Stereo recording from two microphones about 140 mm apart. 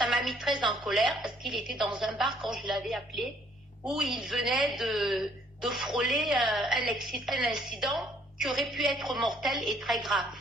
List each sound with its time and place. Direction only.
0.3 s a woman's voice: centre (ahead or behind)